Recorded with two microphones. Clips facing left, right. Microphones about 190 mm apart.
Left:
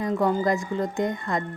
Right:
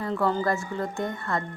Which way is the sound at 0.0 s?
15° left (ahead or behind).